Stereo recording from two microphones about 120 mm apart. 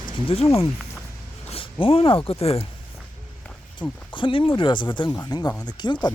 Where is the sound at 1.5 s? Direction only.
50° left (ahead or behind).